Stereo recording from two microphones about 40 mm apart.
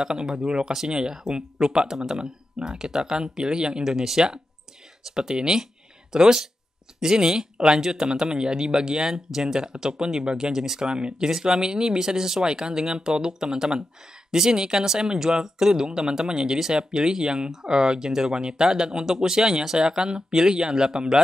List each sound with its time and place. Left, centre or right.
0.0 s speech: centre
10.9 s speech: right